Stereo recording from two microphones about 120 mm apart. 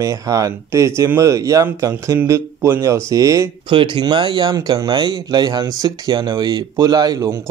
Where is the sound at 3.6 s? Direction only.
45° right (ahead or behind).